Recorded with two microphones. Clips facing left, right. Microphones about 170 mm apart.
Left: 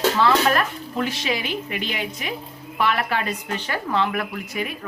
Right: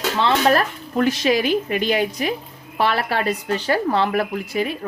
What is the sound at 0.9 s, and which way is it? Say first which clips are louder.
A woman's voice: right 8 dB; 45° right (ahead or behind).